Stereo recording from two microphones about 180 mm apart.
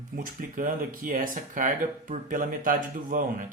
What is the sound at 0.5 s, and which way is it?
Speech, 50° right (ahead or behind).